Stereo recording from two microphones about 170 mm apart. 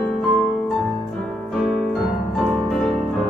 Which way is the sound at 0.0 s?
5° left (ahead or behind).